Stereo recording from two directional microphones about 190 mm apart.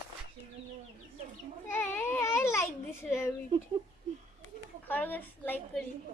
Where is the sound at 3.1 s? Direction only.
15° left (ahead or behind).